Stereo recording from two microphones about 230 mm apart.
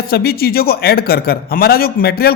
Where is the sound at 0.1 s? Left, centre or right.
Left.